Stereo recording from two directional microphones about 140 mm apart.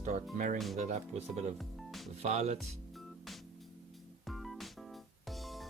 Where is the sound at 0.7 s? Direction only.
55° right (ahead or behind).